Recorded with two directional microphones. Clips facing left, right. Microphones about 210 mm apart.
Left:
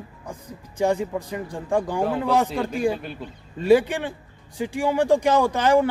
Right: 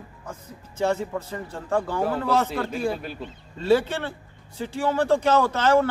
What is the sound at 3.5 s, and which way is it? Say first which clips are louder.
Speech: left 3 dB; 15° left (ahead or behind).